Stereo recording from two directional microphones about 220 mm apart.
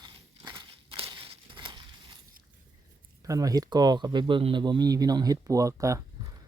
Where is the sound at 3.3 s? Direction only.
15° right (ahead or behind).